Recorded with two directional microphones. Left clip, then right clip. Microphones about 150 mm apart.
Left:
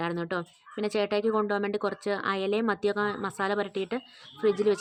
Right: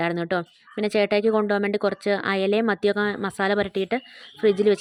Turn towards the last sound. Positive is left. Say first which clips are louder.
# right 5 dB
turn(degrees=-30)  # may be behind; listen again after turning